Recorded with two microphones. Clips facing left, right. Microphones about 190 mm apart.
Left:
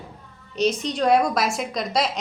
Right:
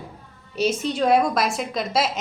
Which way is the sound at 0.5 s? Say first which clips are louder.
Even; 5° right (ahead or behind).